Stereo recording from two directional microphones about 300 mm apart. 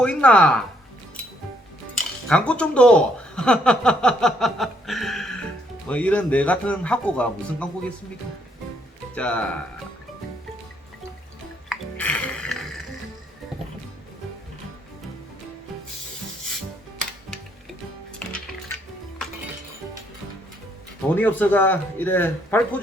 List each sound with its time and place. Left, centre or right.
0.0 s speech: centre
2.3 s speech: centre
9.1 s speech: centre
11.7 s music: centre
18.2 s music: centre
21.2 s speech: centre